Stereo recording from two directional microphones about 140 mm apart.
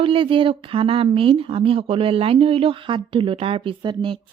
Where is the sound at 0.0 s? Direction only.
40° right (ahead or behind).